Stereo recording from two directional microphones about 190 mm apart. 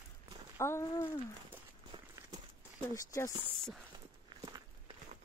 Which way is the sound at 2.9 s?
15° left (ahead or behind).